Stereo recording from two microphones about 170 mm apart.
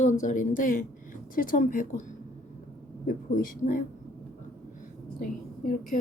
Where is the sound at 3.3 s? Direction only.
55° left (ahead or behind).